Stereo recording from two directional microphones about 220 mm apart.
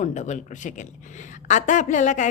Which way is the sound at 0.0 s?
35° left (ahead or behind).